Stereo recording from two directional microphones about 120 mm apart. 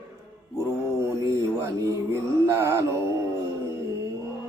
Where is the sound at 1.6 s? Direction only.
25° right (ahead or behind).